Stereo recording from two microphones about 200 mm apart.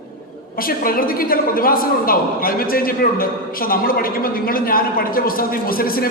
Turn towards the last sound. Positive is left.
turn(degrees=45)  # may be behind; listen again after turning